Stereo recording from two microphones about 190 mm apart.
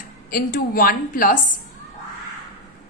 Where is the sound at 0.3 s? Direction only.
50° left (ahead or behind).